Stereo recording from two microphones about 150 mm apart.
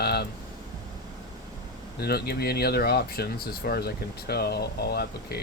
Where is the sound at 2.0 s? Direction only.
90° left.